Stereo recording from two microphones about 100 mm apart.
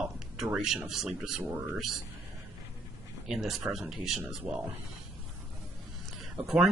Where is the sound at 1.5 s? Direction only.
20° right (ahead or behind).